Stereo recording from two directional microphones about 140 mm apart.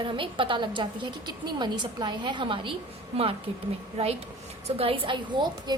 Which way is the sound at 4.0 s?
50° right (ahead or behind).